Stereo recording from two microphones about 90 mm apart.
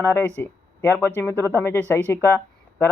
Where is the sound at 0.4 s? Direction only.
30° left (ahead or behind).